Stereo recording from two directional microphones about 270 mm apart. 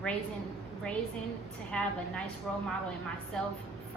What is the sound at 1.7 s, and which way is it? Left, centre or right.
Speech, centre.